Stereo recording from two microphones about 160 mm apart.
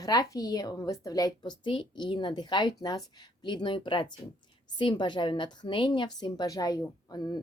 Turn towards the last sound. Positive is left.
turn(degrees=25)  # may be behind; listen again after turning